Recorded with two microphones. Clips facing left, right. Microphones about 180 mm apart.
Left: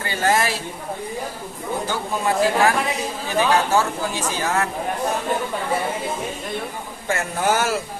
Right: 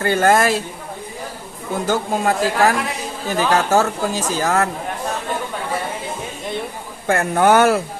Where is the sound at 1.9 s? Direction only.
45° right (ahead or behind).